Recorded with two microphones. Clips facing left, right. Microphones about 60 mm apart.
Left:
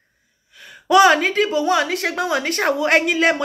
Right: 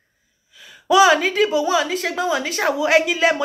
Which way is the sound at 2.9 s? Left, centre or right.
Left.